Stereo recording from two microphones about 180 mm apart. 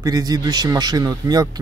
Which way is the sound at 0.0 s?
20° right (ahead or behind).